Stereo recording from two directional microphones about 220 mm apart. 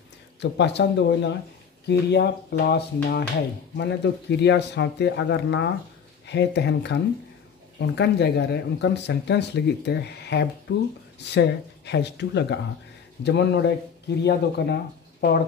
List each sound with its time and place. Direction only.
0.4 s speech: 50° left (ahead or behind)